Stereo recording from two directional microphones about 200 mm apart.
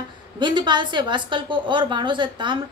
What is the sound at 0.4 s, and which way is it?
A woman's voice, 25° right (ahead or behind).